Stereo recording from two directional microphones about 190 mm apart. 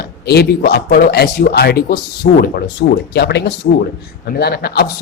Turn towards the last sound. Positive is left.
turn(degrees=55)  # may be behind; listen again after turning